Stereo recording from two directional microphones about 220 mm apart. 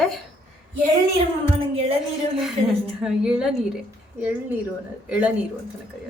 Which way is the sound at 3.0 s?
5° right (ahead or behind).